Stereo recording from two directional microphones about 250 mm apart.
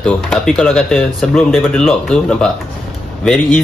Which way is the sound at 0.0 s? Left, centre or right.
Centre.